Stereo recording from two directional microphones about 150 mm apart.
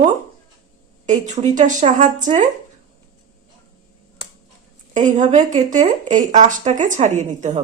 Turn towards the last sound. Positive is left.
turn(degrees=-50)  # may be behind; listen again after turning